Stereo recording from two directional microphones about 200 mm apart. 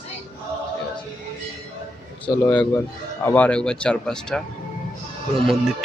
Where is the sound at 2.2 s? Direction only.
5° left (ahead or behind).